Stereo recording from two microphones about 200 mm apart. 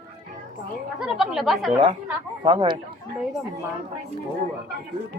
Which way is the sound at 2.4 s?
25° right (ahead or behind).